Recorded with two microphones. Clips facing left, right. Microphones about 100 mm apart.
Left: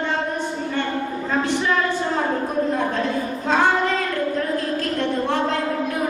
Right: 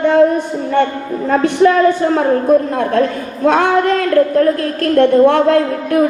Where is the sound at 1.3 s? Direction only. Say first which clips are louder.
Right 11 dB; 55° right (ahead or behind).